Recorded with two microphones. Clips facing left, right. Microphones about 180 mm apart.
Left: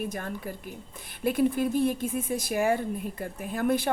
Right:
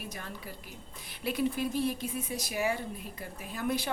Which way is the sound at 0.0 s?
50° left (ahead or behind).